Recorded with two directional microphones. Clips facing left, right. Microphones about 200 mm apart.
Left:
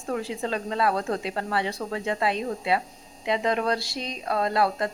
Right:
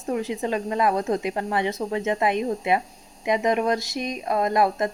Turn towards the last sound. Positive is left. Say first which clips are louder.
# right 3 dB
turn(degrees=-20)  # may be behind; listen again after turning